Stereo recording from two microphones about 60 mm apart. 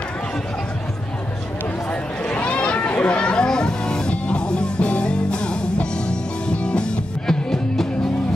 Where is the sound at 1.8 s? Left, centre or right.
Left.